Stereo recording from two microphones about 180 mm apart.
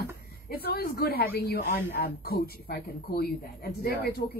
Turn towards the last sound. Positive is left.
turn(degrees=65)  # may be behind; listen again after turning